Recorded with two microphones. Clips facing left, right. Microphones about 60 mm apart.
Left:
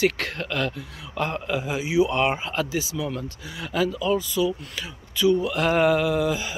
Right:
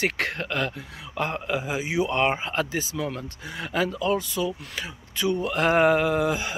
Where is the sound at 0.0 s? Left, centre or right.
Right.